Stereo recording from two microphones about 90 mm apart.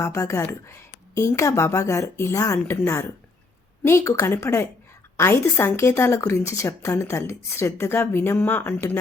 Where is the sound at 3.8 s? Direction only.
35° left (ahead or behind).